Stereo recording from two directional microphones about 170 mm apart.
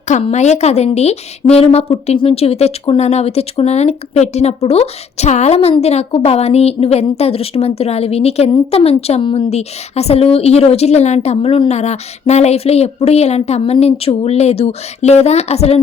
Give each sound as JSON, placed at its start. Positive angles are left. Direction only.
{"t": 0.1, "sound": "a woman's voice", "side_deg": 40}